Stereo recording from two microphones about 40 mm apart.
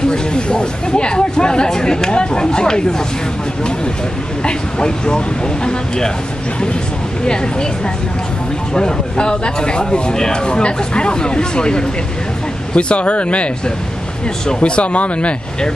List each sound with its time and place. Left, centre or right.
0.1 s speech: left
4.5 s speech: left
8.7 s speech: left
14.6 s speech: left